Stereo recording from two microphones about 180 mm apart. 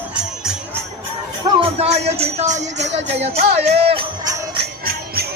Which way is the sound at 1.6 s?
35° right (ahead or behind).